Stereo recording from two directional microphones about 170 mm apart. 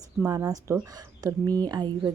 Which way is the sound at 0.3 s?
20° right (ahead or behind).